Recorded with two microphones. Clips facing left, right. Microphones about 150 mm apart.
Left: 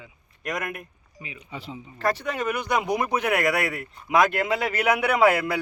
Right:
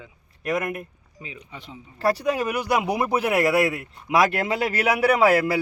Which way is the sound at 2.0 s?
35° right (ahead or behind).